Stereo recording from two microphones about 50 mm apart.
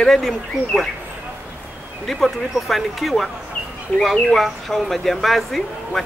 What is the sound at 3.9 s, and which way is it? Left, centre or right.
Speech, left.